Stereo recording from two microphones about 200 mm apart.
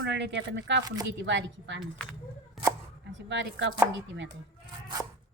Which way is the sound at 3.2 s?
65° right (ahead or behind).